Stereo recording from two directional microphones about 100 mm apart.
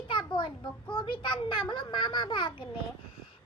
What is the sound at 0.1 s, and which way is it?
A child's voice, 55° left (ahead or behind).